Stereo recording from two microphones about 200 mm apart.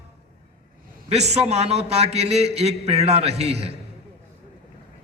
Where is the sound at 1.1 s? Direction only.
30° right (ahead or behind).